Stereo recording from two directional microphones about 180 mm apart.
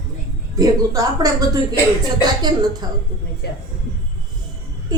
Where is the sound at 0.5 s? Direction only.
20° right (ahead or behind).